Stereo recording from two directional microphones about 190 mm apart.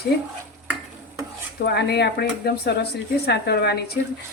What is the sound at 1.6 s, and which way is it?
Speech, 60° left (ahead or behind).